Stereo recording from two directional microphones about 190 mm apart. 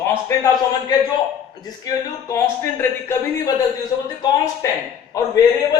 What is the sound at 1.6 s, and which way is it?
Speech, 20° left (ahead or behind).